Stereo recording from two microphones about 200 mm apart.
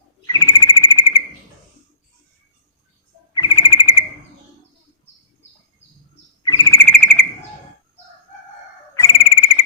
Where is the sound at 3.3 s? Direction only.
25° left (ahead or behind).